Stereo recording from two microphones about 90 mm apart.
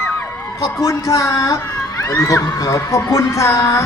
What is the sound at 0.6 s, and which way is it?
A woman's voice, 40° left (ahead or behind).